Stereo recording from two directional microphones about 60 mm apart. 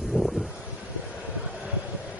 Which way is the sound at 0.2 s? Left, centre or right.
Centre.